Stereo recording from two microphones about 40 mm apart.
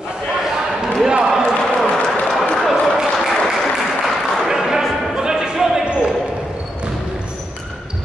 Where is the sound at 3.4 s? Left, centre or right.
Centre.